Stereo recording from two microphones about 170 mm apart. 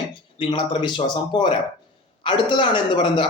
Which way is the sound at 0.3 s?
30° left (ahead or behind).